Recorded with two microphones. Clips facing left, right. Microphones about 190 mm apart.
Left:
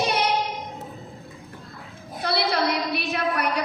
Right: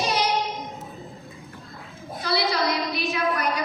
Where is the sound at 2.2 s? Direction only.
60° left (ahead or behind).